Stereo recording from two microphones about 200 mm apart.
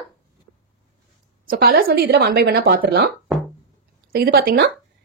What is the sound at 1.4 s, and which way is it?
Speech, 45° right (ahead or behind).